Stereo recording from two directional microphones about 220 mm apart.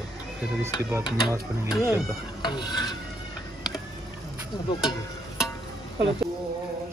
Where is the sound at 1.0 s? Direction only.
20° left (ahead or behind).